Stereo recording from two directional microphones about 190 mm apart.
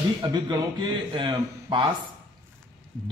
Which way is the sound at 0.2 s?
20° right (ahead or behind).